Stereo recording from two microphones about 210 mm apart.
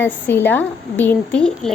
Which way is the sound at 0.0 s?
10° left (ahead or behind).